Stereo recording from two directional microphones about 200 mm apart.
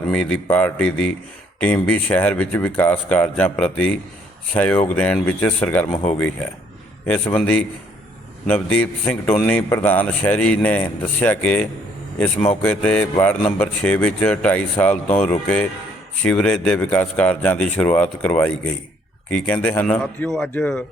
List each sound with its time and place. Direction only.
0.1 s a man's voice: 5° left (ahead or behind)